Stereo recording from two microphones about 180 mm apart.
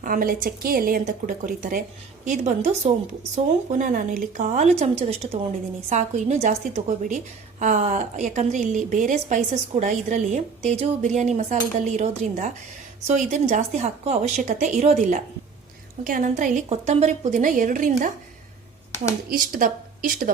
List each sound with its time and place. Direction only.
0.0 s a woman's voice: 50° right (ahead or behind)
19.3 s a woman's voice: 50° right (ahead or behind)